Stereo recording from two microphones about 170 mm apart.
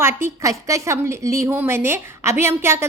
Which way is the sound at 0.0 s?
15° right (ahead or behind).